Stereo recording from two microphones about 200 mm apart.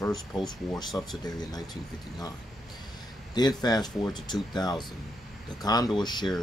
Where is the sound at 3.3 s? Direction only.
20° left (ahead or behind).